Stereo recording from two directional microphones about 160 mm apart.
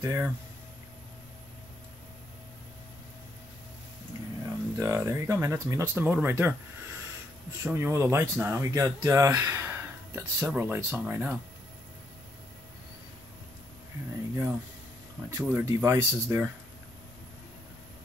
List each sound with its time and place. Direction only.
0.0 s speech: 15° right (ahead or behind)
4.4 s speech: 20° right (ahead or behind)
7.6 s speech: 15° right (ahead or behind)
14.3 s speech: 15° right (ahead or behind)